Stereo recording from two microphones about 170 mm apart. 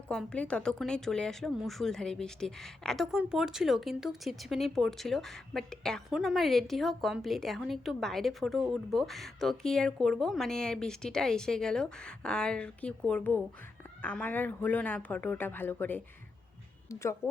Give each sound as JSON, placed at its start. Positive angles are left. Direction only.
{"t": 0.1, "sound": "speech", "side_deg": 5}